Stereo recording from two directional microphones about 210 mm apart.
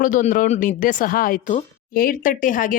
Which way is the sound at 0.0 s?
40° left (ahead or behind).